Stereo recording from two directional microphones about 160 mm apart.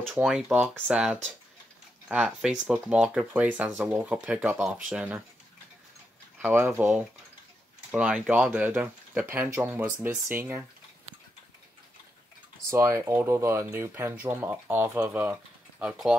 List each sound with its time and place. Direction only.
0.1 s speech: 5° right (ahead or behind)
6.4 s speech: 10° right (ahead or behind)
12.6 s speech: 20° right (ahead or behind)